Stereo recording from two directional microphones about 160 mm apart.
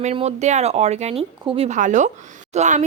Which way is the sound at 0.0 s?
40° right (ahead or behind).